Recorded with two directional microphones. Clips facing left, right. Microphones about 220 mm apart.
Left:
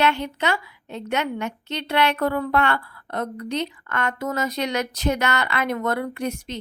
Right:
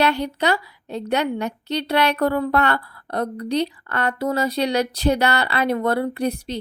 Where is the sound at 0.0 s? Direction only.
35° right (ahead or behind).